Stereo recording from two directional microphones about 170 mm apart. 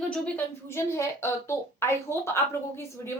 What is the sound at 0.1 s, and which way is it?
A woman's voice, 10° left (ahead or behind).